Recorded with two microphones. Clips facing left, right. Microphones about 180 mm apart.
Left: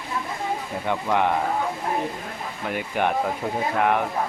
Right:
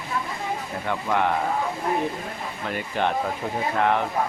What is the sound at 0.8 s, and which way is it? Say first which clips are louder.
Speech: left 1 dB; 15° left (ahead or behind).